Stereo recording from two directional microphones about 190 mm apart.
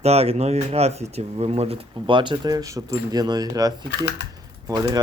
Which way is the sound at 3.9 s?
65° left (ahead or behind).